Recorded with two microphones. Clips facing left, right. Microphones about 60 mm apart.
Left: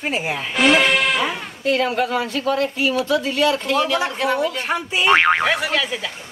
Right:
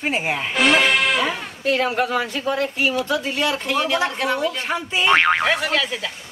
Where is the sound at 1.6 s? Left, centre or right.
Centre.